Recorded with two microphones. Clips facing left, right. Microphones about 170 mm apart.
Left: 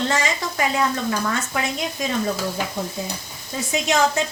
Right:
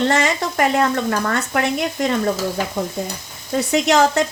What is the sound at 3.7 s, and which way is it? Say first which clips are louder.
Speech: right 4 dB; 70° right (ahead or behind).